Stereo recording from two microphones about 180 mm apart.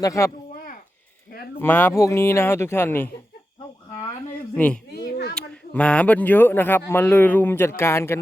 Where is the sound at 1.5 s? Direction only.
10° left (ahead or behind).